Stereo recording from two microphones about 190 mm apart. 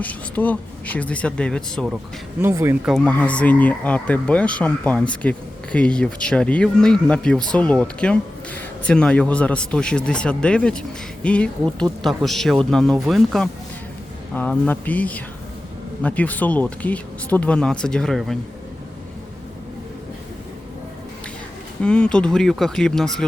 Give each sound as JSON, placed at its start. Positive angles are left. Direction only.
{"t": 0.0, "sound": "speech", "side_deg": 10}
{"t": 2.4, "sound": "speech", "side_deg": -15}
{"t": 2.9, "sound": "speech", "side_deg": 5}
{"t": 21.8, "sound": "speech", "side_deg": 5}